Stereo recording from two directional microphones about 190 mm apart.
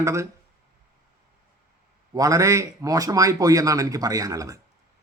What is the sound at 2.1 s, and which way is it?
A man's voice, 20° right (ahead or behind).